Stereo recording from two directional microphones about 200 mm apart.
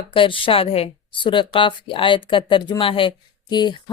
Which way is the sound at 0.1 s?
25° left (ahead or behind).